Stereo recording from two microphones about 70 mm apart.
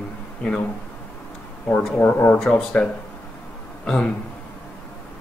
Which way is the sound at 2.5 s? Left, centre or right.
Centre.